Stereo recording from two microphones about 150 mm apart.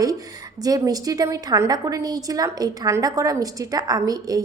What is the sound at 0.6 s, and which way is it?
A woman's voice, 25° right (ahead or behind).